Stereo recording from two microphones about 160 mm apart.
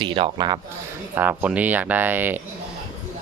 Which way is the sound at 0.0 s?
30° right (ahead or behind).